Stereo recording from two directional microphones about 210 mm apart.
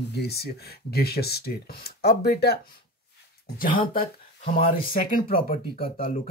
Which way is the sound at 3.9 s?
40° left (ahead or behind).